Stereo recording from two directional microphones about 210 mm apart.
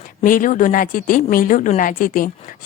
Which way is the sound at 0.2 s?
40° left (ahead or behind).